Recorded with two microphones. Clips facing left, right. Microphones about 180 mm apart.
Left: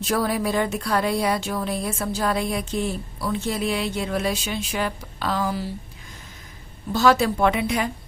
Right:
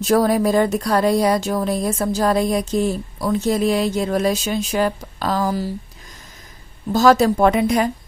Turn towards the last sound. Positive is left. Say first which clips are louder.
# right 6 dB
turn(degrees=-40)  # may be behind; listen again after turning